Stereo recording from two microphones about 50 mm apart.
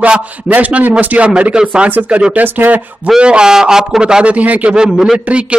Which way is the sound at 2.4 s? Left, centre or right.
Right.